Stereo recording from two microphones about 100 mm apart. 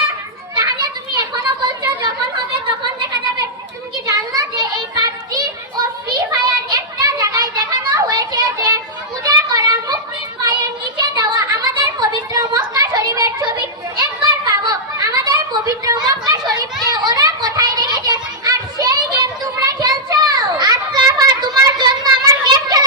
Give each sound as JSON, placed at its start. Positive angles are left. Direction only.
{"t": 0.5, "sound": "children playing", "side_deg": -45}
{"t": 4.0, "sound": "children playing", "side_deg": -40}
{"t": 9.2, "sound": "a sound", "side_deg": -40}